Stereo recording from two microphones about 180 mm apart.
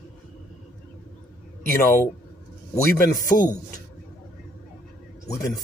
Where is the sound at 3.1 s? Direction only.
45° left (ahead or behind).